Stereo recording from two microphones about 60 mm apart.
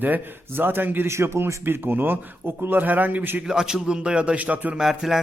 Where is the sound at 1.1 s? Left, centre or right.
Right.